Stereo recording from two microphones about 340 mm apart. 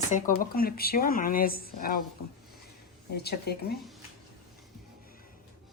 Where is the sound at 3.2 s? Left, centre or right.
Left.